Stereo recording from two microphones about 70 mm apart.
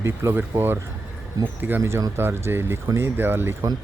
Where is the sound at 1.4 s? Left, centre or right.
Right.